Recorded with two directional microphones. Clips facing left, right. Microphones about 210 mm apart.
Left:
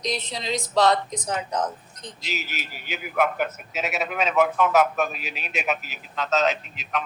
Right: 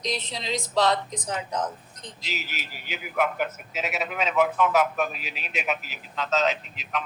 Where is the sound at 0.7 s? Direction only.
45° left (ahead or behind).